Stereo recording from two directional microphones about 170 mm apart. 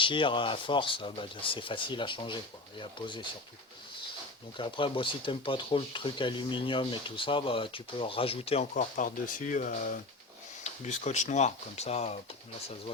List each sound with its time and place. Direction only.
0.0 s speech: 30° left (ahead or behind)
4.5 s speech: 30° left (ahead or behind)